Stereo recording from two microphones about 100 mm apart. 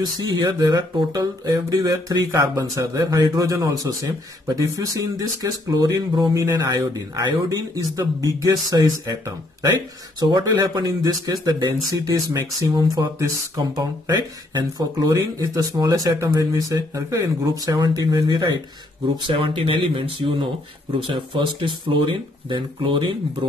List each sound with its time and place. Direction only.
0.0 s speech: 45° right (ahead or behind)
19.2 s speech: 60° right (ahead or behind)